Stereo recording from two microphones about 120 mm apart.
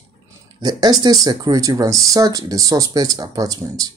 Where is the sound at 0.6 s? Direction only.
35° right (ahead or behind).